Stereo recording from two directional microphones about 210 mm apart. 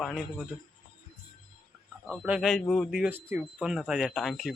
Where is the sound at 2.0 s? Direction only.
Centre (ahead or behind).